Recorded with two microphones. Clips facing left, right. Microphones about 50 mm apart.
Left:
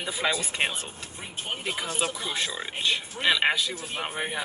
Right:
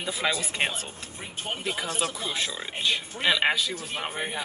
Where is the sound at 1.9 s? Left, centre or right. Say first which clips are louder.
Even; centre.